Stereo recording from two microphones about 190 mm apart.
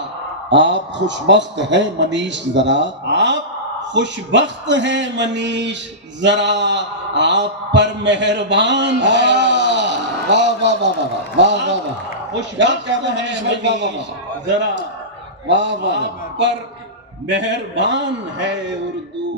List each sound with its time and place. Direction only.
0.5 s a man's voice: 70° right (ahead or behind)